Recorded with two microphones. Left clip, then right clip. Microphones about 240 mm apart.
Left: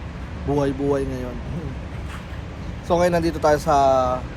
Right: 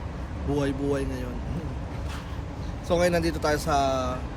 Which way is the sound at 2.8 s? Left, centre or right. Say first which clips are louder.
Left 5 dB; centre.